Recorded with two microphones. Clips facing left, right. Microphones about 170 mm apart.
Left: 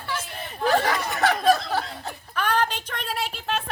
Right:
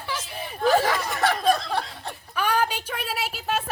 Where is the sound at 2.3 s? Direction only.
10° right (ahead or behind).